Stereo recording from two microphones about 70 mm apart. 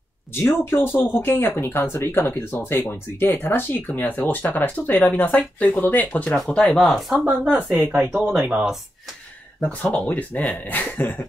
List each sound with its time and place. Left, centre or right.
0.3 s speech: left
6.3 s speech: centre
6.8 s speech: centre
7.8 s speech: right
8.2 s speech: centre
9.9 s speech: left